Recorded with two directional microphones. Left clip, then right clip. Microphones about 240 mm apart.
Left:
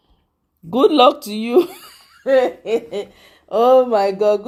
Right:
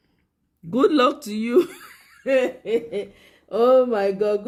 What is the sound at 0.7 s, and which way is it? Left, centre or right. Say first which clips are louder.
Speech: left 6 dB; centre.